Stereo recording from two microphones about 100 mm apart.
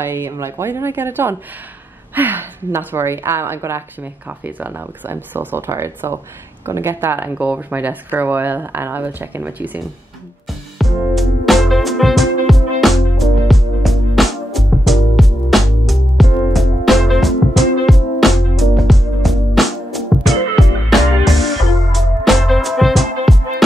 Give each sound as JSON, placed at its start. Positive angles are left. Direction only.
{"t": 0.0, "sound": "speech", "side_deg": -20}
{"t": 10.8, "sound": "music", "side_deg": 0}